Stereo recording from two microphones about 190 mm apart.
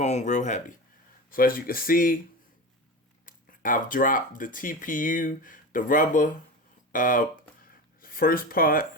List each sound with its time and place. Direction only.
0.0 s speech: 35° left (ahead or behind)
3.2 s speech: 45° left (ahead or behind)